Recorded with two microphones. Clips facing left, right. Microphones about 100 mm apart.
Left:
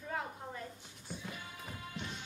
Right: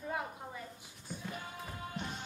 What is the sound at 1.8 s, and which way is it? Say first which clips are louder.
Music: right 3 dB; 45° right (ahead or behind).